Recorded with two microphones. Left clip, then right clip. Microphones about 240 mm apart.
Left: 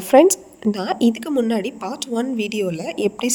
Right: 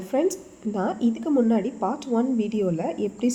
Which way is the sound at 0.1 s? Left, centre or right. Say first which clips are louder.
Left 12 dB; left.